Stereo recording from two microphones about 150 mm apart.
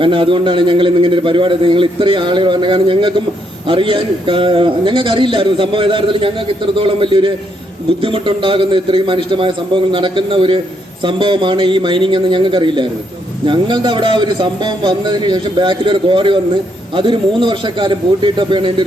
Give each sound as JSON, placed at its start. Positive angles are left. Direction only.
{"t": 0.0, "sound": "a man's voice", "side_deg": -35}